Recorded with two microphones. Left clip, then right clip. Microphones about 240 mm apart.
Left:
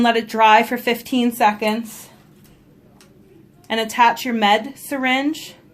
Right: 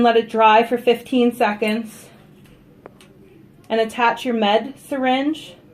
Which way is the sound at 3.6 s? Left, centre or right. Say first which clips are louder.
Left 2 dB; left.